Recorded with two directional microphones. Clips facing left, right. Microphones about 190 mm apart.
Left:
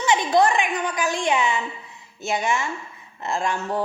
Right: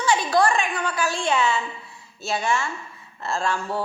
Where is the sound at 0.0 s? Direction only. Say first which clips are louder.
Left 2 dB; 20° left (ahead or behind).